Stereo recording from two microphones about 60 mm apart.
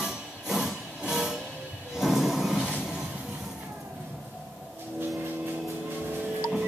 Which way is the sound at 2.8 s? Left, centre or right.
Centre.